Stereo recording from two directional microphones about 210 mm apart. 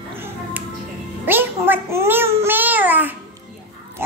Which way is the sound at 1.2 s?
10° right (ahead or behind).